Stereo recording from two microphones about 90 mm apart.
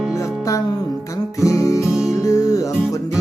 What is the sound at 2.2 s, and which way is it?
Music, 40° left (ahead or behind).